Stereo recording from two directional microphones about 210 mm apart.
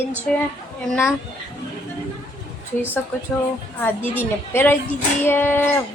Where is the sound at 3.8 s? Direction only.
10° left (ahead or behind).